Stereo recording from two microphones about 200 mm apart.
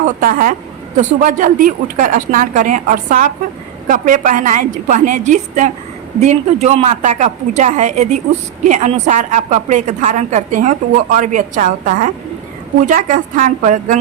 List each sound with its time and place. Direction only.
0.2 s a woman's voice: 45° right (ahead or behind)